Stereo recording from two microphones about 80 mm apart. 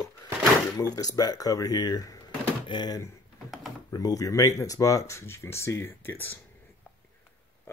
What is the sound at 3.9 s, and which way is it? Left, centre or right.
Speech, left.